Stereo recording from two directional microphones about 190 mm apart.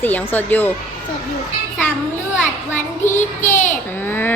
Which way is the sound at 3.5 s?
40° left (ahead or behind).